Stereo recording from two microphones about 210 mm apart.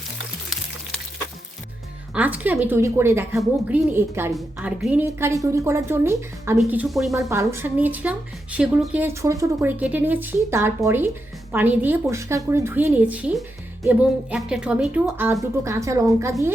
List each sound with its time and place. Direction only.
2.1 s speech: 10° right (ahead or behind)
7.1 s speech: 15° right (ahead or behind)